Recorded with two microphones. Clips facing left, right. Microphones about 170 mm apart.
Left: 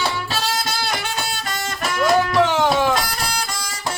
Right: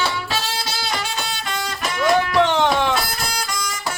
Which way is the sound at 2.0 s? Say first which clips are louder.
Even; 5° left (ahead or behind).